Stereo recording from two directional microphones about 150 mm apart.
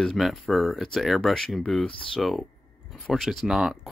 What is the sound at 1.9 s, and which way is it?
Speech, 35° left (ahead or behind).